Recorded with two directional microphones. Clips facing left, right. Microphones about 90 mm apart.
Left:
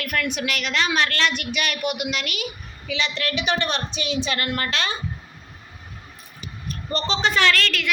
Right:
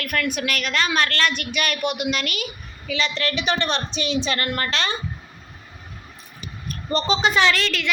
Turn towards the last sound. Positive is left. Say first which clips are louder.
# right 1 dB
turn(degrees=0)  # may be behind; listen again after turning